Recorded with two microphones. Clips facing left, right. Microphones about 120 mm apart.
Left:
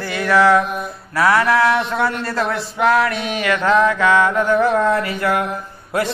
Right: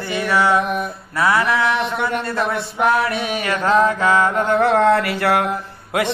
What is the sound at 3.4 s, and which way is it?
Mantra, 40° right (ahead or behind).